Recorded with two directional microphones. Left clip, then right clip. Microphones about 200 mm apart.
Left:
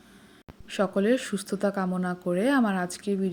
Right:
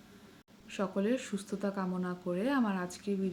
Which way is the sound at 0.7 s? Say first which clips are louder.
Left 9 dB; 35° left (ahead or behind).